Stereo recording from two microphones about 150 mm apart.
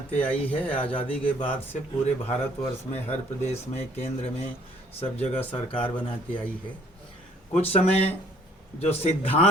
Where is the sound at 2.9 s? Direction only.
45° left (ahead or behind).